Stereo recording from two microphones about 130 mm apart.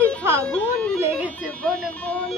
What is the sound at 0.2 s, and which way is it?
Bagpipes, 20° right (ahead or behind).